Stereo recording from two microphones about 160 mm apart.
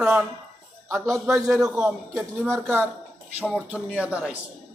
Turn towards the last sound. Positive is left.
turn(degrees=-5)  # may be behind; listen again after turning